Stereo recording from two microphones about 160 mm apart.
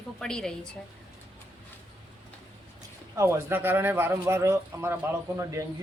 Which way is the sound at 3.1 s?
15° right (ahead or behind).